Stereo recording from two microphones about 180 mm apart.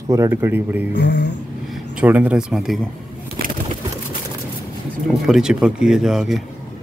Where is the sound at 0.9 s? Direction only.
70° left (ahead or behind).